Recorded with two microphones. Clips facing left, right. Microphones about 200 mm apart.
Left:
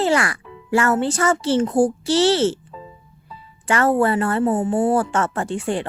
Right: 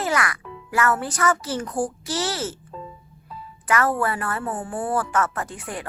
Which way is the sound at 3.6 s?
25° left (ahead or behind).